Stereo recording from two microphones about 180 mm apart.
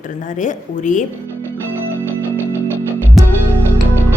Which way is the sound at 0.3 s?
45° left (ahead or behind).